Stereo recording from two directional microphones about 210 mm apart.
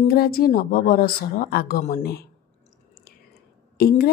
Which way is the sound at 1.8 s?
35° left (ahead or behind).